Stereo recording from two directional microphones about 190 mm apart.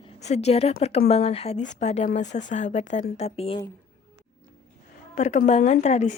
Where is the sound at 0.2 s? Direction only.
35° left (ahead or behind).